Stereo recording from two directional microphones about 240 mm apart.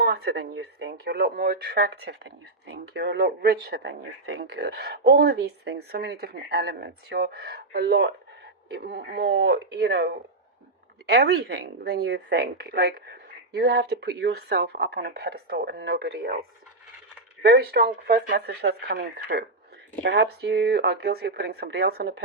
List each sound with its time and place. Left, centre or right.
0.0 s speech: right
17.4 s speech: right